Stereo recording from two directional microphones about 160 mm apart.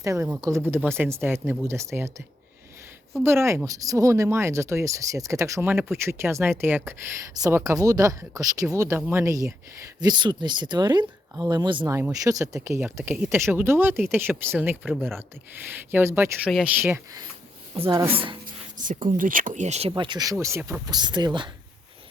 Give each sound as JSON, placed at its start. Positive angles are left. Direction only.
{"t": 0.0, "sound": "speech", "side_deg": -15}
{"t": 3.2, "sound": "speech", "side_deg": -15}
{"t": 11.9, "sound": "speech", "side_deg": -15}
{"t": 14.8, "sound": "speech", "side_deg": 0}
{"t": 15.7, "sound": "speech", "side_deg": -15}
{"t": 17.7, "sound": "speech", "side_deg": -40}
{"t": 19.1, "sound": "speech", "side_deg": -60}
{"t": 20.0, "sound": "speech", "side_deg": -25}
{"t": 20.8, "sound": "speech", "side_deg": -25}